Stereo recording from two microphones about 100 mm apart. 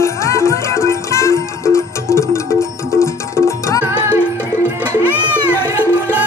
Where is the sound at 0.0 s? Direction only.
30° left (ahead or behind).